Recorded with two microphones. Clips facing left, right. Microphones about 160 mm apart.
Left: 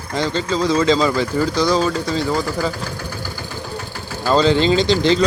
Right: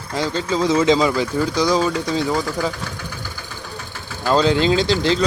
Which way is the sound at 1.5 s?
15° right (ahead or behind).